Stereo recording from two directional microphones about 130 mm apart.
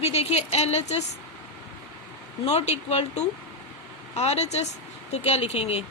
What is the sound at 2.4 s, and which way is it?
Speech, 60° left (ahead or behind).